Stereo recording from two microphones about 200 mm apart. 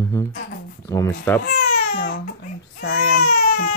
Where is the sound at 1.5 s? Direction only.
45° left (ahead or behind).